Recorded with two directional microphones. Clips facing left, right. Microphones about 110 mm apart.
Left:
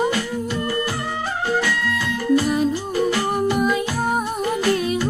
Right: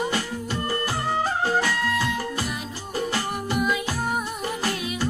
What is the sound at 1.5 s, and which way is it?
Music, 35° right (ahead or behind).